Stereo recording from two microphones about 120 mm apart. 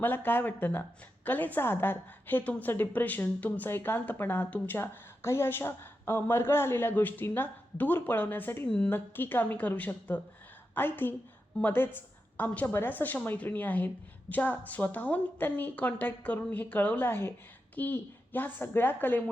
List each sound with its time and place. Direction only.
0.0 s a woman's voice: 15° left (ahead or behind)